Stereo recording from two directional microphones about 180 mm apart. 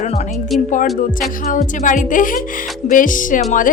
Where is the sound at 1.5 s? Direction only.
45° left (ahead or behind).